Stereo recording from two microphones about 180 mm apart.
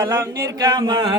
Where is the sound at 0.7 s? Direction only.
25° right (ahead or behind).